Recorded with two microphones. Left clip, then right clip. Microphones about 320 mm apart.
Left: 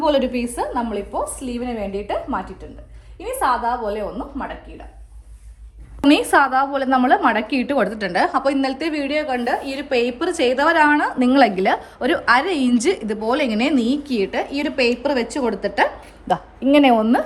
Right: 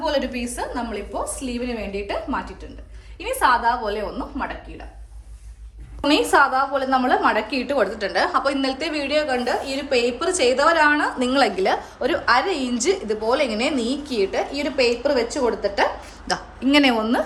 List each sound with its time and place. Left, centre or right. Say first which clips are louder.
0.0 s a woman's voice: left 5 dB; centre
6.0 s a woman's voice: left 2 dB; left
16.3 s a woman's voice: left 3 dB; centre